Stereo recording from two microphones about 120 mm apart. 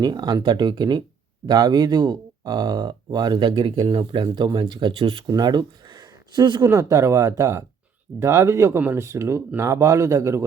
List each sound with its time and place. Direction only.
0.0 s speech: 35° right (ahead or behind); by 5.3 s 50° right (ahead or behind)
5.3 s speech: 35° right (ahead or behind)